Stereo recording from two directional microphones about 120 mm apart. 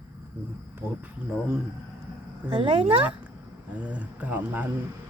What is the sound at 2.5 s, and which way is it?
Speech, 45° right (ahead or behind).